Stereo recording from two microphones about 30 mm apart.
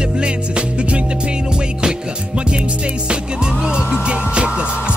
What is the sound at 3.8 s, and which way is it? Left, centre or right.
Music, right.